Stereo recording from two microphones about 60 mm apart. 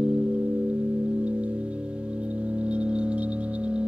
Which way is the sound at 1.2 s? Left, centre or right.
Right.